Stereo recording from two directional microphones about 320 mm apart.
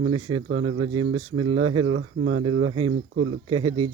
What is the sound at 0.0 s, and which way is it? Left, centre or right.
Speech, right.